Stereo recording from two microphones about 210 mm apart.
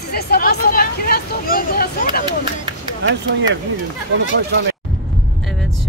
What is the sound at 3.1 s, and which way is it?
Speech, 60° right (ahead or behind).